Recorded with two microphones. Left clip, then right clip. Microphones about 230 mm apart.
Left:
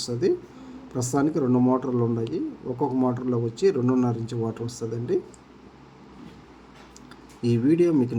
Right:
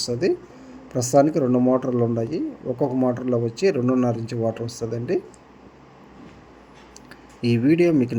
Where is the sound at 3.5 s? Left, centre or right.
Left.